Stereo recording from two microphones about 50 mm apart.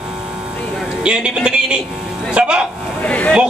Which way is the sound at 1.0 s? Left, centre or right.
Centre.